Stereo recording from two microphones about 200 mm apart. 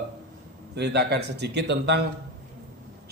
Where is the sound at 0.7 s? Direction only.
55° right (ahead or behind).